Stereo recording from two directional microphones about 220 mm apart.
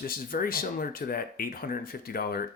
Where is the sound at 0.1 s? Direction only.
40° left (ahead or behind).